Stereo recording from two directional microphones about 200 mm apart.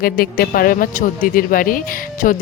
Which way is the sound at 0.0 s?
45° left (ahead or behind).